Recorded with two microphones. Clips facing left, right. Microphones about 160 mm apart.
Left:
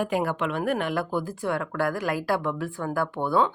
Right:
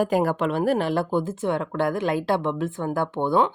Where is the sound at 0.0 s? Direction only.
40° right (ahead or behind).